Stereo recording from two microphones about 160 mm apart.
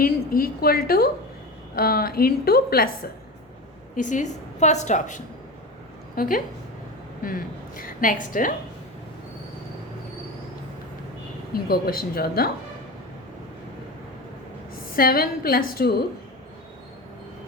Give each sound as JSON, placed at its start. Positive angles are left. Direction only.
{"t": 0.0, "sound": "a woman's voice", "side_deg": 65}
{"t": 3.9, "sound": "a woman's voice", "side_deg": 50}
{"t": 11.5, "sound": "a woman's voice", "side_deg": 70}
{"t": 14.9, "sound": "a woman's voice", "side_deg": 65}